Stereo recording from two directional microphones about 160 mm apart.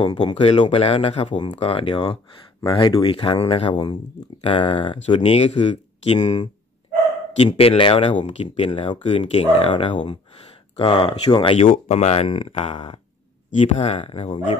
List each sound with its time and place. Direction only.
0.0 s speech: 35° left (ahead or behind)
7.3 s speech: 35° left (ahead or behind)